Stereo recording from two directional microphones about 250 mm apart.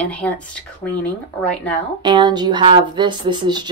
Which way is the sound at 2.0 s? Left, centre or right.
Centre.